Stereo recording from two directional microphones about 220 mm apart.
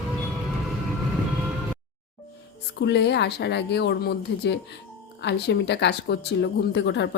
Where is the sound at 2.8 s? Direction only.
50° left (ahead or behind).